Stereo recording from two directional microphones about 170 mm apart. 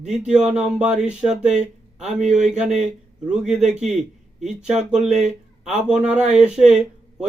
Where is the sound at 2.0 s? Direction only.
45° right (ahead or behind).